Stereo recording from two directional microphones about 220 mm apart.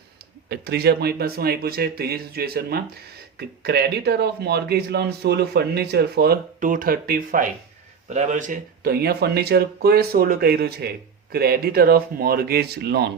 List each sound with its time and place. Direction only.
0.4 s speech: 45° right (ahead or behind)